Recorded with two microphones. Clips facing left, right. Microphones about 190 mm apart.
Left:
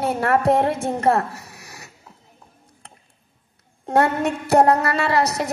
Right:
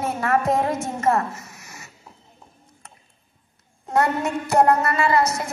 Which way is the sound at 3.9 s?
35° left (ahead or behind).